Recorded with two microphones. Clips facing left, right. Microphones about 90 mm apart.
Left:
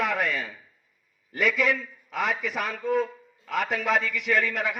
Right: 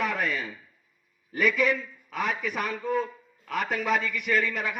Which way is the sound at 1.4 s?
90° left.